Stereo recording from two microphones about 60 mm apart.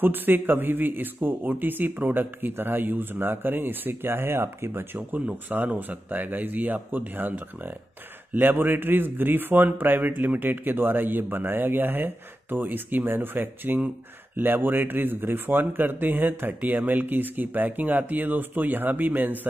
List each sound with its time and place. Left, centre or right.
0.0 s a man's voice: right
5.1 s a man's voice: right